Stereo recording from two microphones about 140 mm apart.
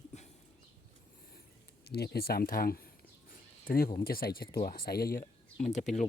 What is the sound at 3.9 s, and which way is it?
Speech, 90° left.